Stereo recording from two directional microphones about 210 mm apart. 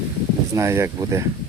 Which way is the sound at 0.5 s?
15° right (ahead or behind).